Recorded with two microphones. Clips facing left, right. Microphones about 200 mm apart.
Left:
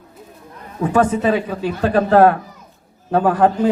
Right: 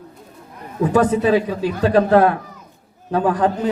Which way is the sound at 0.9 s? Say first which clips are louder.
Right 1 dB; 35° right (ahead or behind).